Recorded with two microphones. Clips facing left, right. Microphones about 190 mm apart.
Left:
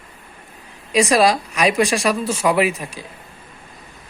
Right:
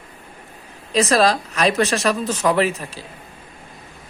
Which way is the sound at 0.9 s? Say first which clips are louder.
Left 1 dB; 10° left (ahead or behind).